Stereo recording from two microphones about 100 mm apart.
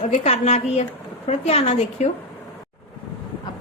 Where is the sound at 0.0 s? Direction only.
90° left.